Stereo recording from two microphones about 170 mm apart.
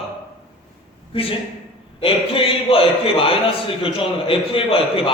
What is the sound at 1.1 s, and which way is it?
A man's voice, 35° left (ahead or behind).